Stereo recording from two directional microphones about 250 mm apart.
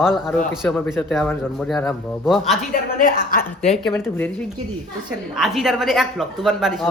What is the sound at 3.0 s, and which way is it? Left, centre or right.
Speech, left.